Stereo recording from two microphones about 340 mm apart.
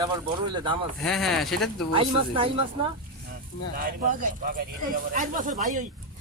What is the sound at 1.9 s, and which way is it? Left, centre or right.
Speech, centre.